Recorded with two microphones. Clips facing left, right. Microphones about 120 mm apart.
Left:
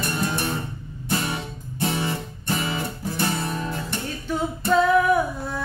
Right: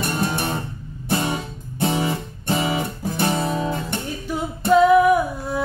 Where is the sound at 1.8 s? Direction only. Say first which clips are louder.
Right 4 dB; 20° right (ahead or behind).